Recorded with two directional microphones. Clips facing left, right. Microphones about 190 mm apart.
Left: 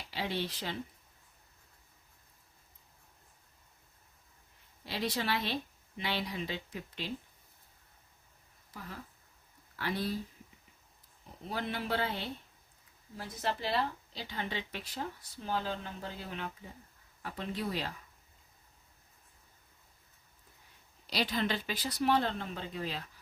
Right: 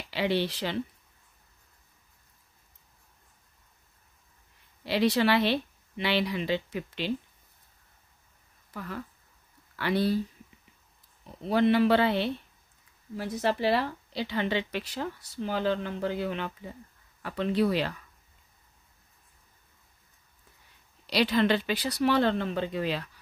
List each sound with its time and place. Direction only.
0.1 s speech: 75° right (ahead or behind)
4.8 s speech: 75° right (ahead or behind)
8.7 s speech: 75° right (ahead or behind)
11.4 s speech: 80° right
21.1 s speech: 75° right (ahead or behind)